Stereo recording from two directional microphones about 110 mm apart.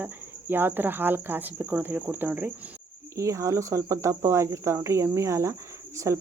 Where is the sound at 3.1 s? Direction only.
30° right (ahead or behind).